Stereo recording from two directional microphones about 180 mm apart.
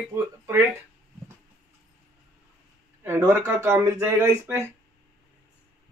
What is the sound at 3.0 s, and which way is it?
Speech, 15° right (ahead or behind).